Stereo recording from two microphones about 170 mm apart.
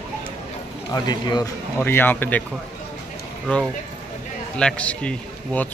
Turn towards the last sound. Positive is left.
turn(degrees=5)  # may be behind; listen again after turning